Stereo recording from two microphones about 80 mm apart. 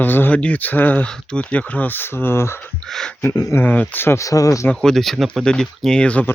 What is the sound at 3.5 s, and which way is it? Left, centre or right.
Speech, left.